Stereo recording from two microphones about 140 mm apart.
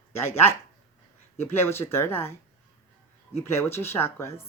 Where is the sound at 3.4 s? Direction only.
20° left (ahead or behind).